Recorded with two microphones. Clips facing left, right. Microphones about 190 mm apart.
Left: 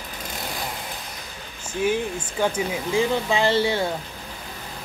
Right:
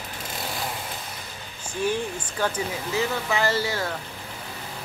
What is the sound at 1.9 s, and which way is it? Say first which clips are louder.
Speech: left 3 dB; 10° left (ahead or behind).